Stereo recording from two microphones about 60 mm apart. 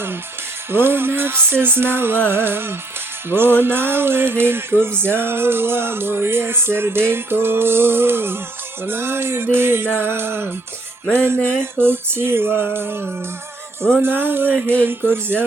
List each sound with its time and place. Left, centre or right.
0.7 s music: right
11.6 s music: right